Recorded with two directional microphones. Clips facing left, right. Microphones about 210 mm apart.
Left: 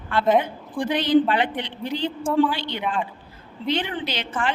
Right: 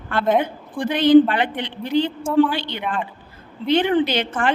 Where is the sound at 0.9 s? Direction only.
55° right (ahead or behind).